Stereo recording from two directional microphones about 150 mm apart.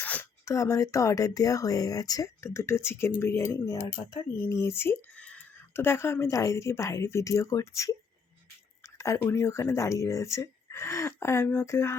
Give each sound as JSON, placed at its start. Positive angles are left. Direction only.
{"t": 0.0, "sound": "speech", "side_deg": 10}
{"t": 9.0, "sound": "speech", "side_deg": 15}